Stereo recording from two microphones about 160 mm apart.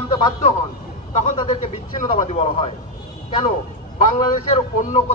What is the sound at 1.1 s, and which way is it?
A man's voice, 45° left (ahead or behind).